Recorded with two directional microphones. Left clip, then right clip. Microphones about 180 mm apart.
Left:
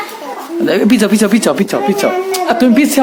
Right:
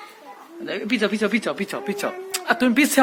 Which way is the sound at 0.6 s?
35° left (ahead or behind).